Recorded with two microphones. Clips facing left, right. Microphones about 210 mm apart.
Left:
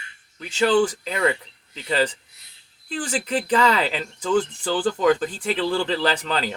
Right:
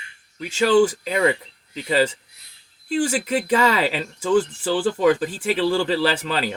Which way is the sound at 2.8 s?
10° right (ahead or behind).